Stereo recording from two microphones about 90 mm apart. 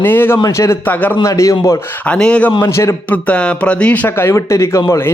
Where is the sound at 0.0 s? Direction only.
20° left (ahead or behind).